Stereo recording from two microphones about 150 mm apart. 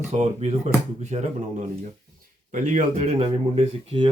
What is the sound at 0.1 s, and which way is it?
Speech, 45° right (ahead or behind).